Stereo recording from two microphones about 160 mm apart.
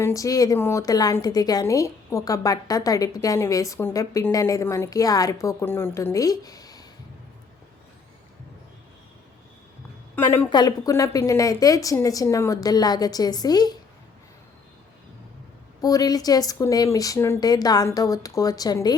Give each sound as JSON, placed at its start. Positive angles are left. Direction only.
{"t": 0.0, "sound": "a woman's voice", "side_deg": 20}
{"t": 10.2, "sound": "a woman's voice", "side_deg": 15}
{"t": 10.5, "sound": "a woman's voice", "side_deg": 25}
{"t": 15.8, "sound": "a woman's voice", "side_deg": 25}